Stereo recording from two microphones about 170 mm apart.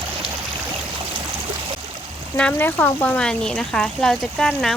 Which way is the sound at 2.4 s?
10° left (ahead or behind).